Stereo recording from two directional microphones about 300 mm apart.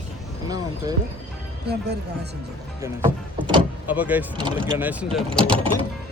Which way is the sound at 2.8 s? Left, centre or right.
Centre.